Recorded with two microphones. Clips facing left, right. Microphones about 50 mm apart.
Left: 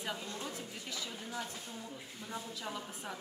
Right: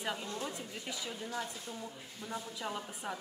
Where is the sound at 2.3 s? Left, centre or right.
Centre.